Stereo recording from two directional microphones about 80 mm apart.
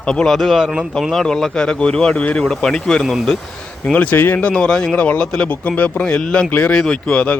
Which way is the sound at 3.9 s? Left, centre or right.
Left.